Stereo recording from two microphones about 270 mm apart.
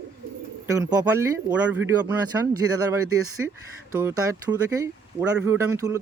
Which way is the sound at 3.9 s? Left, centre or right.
Centre.